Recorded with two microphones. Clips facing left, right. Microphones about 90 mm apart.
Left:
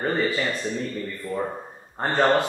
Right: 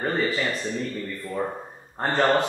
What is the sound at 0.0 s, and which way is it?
Speech, centre (ahead or behind).